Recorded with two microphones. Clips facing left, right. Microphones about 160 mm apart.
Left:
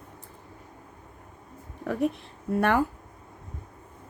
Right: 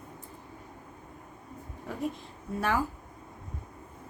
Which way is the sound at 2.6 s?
60° left (ahead or behind).